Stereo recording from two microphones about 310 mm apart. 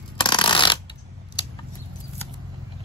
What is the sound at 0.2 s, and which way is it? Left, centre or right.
Shuffling cards, centre.